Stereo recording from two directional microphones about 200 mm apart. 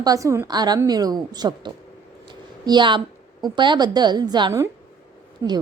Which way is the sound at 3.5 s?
25° right (ahead or behind).